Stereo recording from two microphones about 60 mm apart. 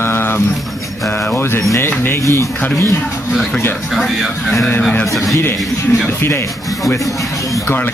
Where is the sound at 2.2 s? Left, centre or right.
Left.